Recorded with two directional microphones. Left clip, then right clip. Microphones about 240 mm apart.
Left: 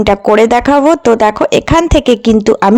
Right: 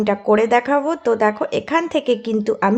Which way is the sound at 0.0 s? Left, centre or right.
Left.